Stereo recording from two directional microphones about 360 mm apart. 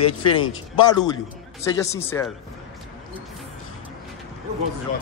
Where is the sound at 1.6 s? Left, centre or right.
Centre.